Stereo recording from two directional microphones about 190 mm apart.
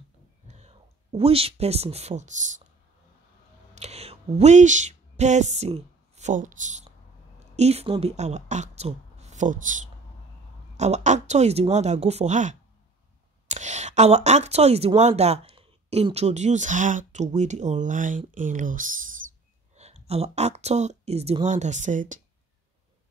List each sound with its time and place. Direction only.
0.5 s speech: 35° right (ahead or behind)
3.7 s a sound: 35° right (ahead or behind)
7.3 s speech: 35° right (ahead or behind)
10.8 s speech: 35° right (ahead or behind)
19.2 s owl: 90° right
19.7 s a woman's voice: 35° right (ahead or behind)